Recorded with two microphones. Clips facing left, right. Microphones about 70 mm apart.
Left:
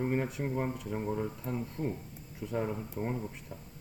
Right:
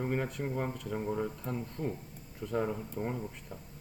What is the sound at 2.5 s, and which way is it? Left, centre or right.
Speech, centre.